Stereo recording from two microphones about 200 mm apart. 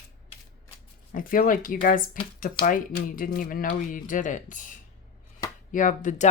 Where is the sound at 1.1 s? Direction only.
45° left (ahead or behind).